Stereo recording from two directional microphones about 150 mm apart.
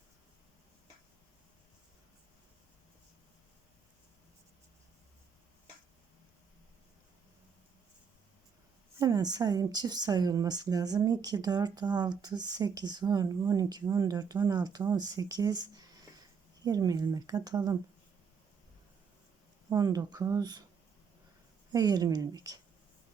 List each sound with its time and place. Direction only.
9.0 s speech: 25° right (ahead or behind)
19.7 s speech: 25° right (ahead or behind)
21.7 s speech: 25° right (ahead or behind)